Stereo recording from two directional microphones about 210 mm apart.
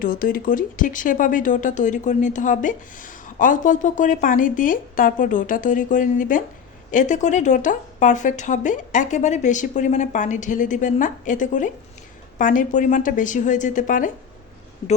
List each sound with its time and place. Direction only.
0.0 s speech: 45° left (ahead or behind)